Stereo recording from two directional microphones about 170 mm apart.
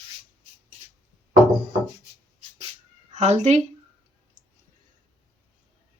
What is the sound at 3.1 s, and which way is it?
Speech, 40° right (ahead or behind).